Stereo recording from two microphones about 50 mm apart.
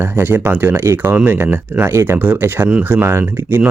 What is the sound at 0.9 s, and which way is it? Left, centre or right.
Speech, right.